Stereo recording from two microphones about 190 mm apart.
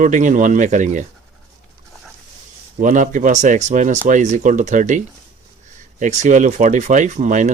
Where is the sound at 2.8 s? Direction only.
40° right (ahead or behind).